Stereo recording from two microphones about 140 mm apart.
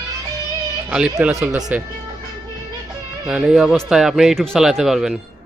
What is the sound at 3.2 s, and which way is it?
Speech, 5° right (ahead or behind).